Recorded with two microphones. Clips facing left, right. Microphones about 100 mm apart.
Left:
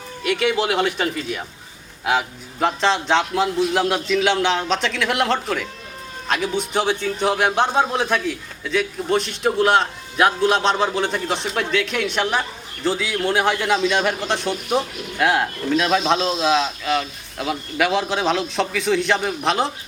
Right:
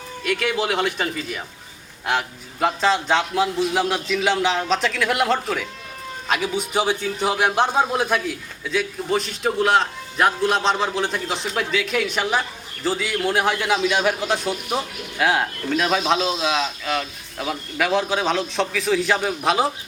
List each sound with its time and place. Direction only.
0.3 s a man's voice: centre (ahead or behind)